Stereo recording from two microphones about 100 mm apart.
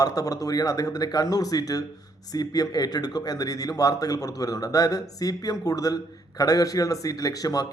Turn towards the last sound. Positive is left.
turn(degrees=40)  # may be behind; listen again after turning